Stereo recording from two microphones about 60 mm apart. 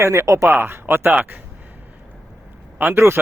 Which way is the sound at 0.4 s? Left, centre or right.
Right.